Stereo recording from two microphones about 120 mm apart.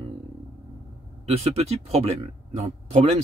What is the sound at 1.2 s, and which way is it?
Speech, 60° right (ahead or behind).